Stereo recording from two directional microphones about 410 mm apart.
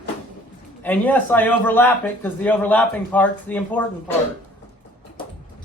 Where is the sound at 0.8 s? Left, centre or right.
Centre.